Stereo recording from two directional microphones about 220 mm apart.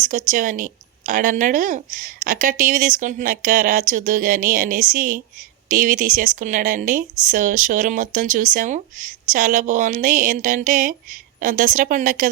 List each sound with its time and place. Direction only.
0.0 s a woman's voice: 35° right (ahead or behind)